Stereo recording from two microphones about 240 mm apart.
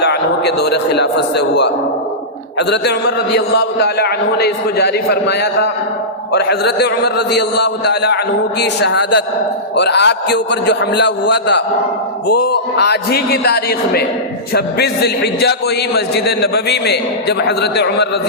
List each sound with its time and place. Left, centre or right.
0.0 s a man's voice: left